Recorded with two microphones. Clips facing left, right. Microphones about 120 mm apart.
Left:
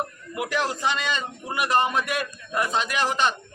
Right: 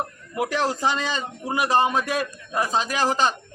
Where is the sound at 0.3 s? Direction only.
35° right (ahead or behind).